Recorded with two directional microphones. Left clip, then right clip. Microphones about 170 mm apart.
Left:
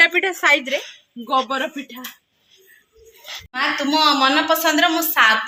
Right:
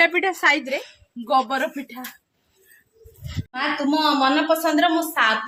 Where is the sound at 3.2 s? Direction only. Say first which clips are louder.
Left 3 dB; centre (ahead or behind).